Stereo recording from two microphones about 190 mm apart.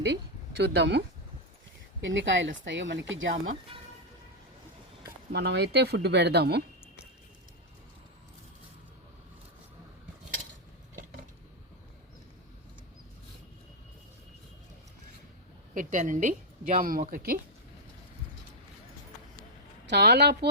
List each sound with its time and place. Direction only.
0.6 s speech: 65° right (ahead or behind)
2.0 s speech: 75° right (ahead or behind)
5.3 s speech: 60° right (ahead or behind)
15.7 s a woman's voice: 45° right (ahead or behind)
19.9 s speech: 60° right (ahead or behind)